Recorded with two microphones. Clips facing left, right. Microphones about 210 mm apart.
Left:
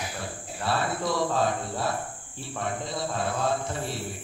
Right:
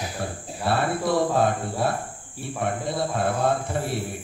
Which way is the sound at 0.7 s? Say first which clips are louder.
Right 4 dB; 55° right (ahead or behind).